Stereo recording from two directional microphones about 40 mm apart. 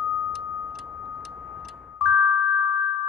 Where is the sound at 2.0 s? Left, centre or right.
Right.